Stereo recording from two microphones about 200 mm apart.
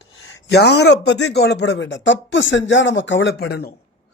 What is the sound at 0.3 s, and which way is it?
Speech, 55° left (ahead or behind).